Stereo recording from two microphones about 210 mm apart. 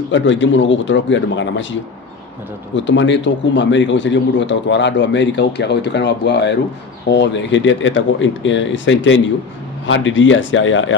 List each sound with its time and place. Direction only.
0.1 s a man's voice: 60° left (ahead or behind)